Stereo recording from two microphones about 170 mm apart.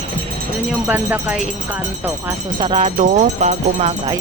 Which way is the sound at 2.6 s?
35° right (ahead or behind).